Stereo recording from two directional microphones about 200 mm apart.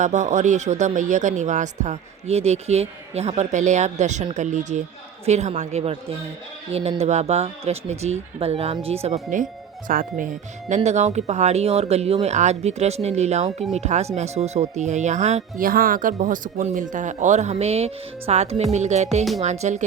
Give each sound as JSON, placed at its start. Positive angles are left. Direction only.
{"t": 0.0, "sound": "speech", "side_deg": -35}